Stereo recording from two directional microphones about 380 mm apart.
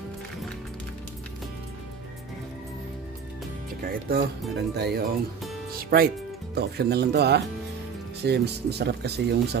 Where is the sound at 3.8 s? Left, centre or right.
Right.